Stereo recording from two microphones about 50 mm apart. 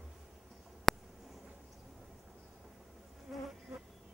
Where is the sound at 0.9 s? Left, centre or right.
Centre.